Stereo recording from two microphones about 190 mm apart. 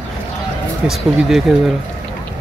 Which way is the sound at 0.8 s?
Centre (ahead or behind).